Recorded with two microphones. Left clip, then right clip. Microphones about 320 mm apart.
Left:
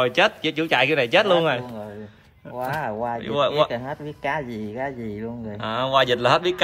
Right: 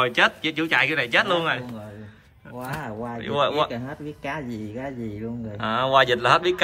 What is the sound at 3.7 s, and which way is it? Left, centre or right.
Speech, left.